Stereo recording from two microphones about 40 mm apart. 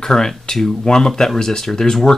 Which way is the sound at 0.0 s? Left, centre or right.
Centre.